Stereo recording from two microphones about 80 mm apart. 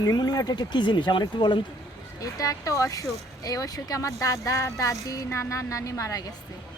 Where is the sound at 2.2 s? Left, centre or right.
Left.